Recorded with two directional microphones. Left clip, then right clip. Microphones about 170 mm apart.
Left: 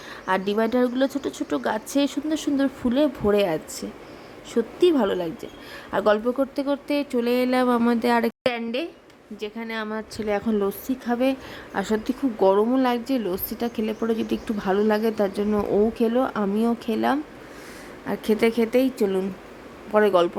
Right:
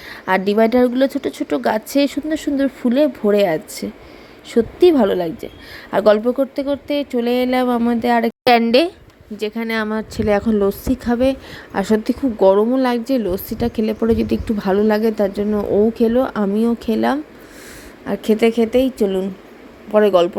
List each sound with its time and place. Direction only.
0.1 s a woman's voice: 20° right (ahead or behind)
9.4 s a woman's voice: 35° right (ahead or behind); by 20.3 s 15° right (ahead or behind)